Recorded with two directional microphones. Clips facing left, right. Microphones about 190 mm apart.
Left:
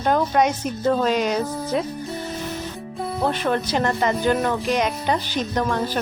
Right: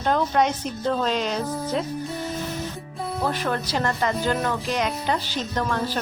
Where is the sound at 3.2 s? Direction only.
25° left (ahead or behind).